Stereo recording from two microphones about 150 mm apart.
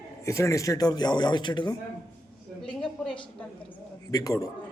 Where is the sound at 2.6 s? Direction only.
5° left (ahead or behind).